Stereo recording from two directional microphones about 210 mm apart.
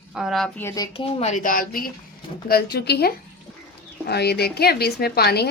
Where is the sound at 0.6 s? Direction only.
10° left (ahead or behind).